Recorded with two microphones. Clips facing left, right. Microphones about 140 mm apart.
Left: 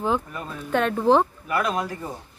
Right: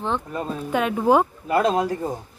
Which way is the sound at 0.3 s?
30° right (ahead or behind).